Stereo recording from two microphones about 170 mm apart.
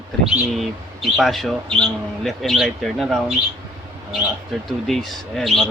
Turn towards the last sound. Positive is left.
turn(degrees=0)  # may be behind; listen again after turning